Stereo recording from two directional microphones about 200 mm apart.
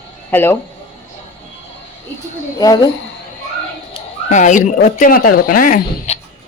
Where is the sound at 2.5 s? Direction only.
20° left (ahead or behind).